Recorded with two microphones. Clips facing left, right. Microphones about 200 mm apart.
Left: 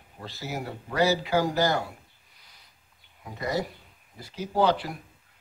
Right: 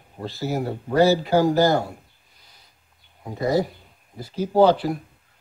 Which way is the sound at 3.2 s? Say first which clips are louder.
Right 8 dB; 30° right (ahead or behind).